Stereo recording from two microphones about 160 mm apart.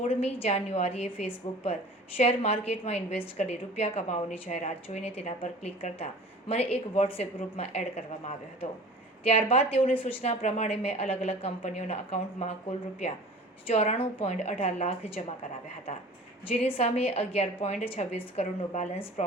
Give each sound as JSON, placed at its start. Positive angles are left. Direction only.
{"t": 0.0, "sound": "a woman's voice", "side_deg": 40}
{"t": 13.7, "sound": "a woman's voice", "side_deg": 40}
{"t": 16.5, "sound": "a woman's voice", "side_deg": 35}